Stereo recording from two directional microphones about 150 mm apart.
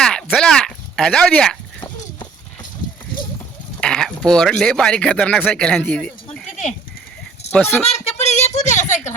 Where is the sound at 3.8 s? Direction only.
5° left (ahead or behind).